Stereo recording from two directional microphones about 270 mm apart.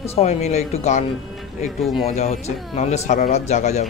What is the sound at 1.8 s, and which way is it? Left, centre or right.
Speech, centre.